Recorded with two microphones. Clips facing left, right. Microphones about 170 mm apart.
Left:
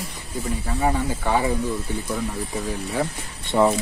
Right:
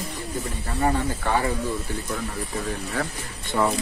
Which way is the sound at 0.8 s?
5° left (ahead or behind).